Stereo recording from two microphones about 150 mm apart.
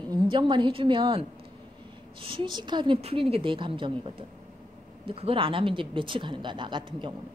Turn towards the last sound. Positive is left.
turn(degrees=-35)  # may be behind; listen again after turning